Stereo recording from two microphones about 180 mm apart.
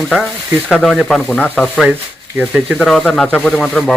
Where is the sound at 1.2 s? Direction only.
5° left (ahead or behind).